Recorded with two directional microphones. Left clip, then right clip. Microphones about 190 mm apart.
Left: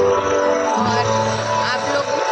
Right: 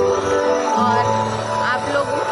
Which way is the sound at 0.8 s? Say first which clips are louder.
Right 2 dB; 10° right (ahead or behind).